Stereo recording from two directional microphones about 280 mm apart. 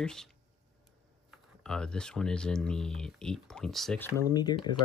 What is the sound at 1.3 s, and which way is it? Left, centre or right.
Speech, centre.